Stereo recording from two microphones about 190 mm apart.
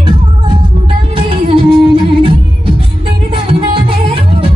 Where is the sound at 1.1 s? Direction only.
30° right (ahead or behind).